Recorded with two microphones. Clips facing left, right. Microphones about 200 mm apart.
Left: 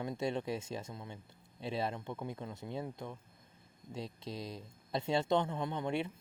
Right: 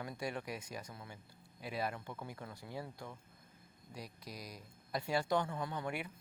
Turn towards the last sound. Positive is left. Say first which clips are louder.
# left 5 dB
turn(degrees=25)  # may be behind; listen again after turning